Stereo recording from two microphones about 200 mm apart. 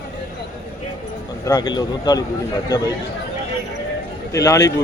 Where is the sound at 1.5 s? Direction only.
20° left (ahead or behind).